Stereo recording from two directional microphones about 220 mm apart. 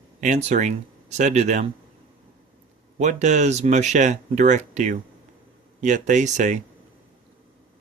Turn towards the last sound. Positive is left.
turn(degrees=-35)  # may be behind; listen again after turning